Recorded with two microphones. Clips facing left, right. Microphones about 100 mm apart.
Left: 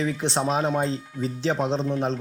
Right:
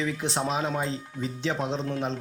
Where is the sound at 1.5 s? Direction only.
30° left (ahead or behind).